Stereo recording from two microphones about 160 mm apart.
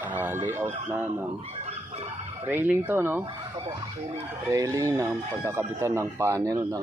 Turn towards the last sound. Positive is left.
turn(degrees=-20)  # may be behind; listen again after turning